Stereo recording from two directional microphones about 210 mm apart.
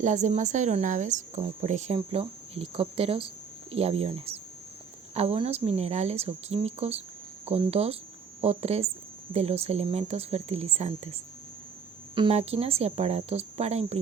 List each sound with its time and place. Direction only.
0.0 s speech: 35° right (ahead or behind)
4.3 s a sound: 25° right (ahead or behind)
5.1 s speech: 30° right (ahead or behind)